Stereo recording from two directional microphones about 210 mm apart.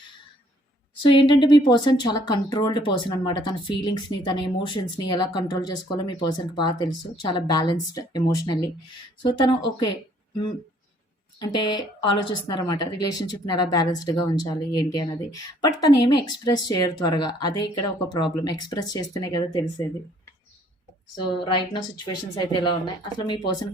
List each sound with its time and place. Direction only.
1.0 s speech: 20° left (ahead or behind)
11.3 s speech: 20° left (ahead or behind)
21.3 s speech: 20° left (ahead or behind)